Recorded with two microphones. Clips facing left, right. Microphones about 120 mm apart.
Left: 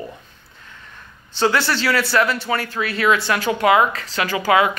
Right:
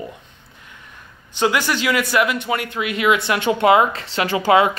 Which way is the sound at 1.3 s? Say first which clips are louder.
Even; 15° right (ahead or behind).